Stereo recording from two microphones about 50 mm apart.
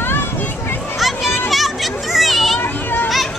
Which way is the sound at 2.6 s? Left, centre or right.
Left.